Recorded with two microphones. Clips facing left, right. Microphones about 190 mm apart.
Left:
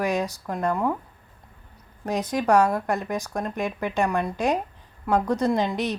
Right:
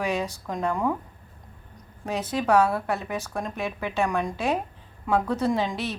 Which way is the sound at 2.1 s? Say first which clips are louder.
Left 1 dB; 15° left (ahead or behind).